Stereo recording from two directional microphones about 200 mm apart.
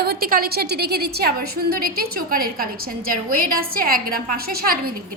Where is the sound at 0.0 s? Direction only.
50° right (ahead or behind).